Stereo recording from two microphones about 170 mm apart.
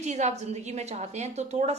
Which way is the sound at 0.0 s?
45° right (ahead or behind).